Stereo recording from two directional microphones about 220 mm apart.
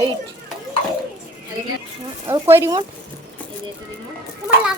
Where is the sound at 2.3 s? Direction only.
10° right (ahead or behind).